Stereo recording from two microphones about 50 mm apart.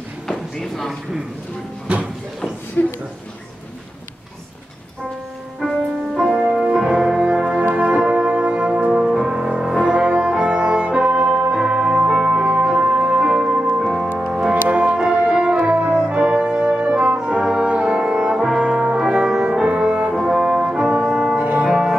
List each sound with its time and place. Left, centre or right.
0.3 s a sound: centre
1.9 s a sound: right
2.8 s speech: left
6.2 s music: centre
14.7 s music: right
16.1 s brass instrument: right
18.6 s brass instrument: right
20.1 s brass instrument: centre
21.6 s music: centre